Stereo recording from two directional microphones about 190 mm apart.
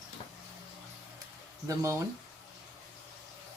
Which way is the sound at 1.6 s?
15° right (ahead or behind).